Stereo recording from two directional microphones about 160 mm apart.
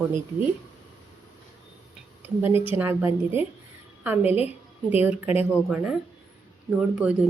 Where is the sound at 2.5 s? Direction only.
35° left (ahead or behind).